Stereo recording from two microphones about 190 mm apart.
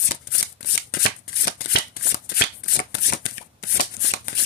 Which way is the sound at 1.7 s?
60° left (ahead or behind).